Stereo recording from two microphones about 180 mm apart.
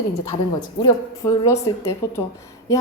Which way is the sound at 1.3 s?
15° left (ahead or behind).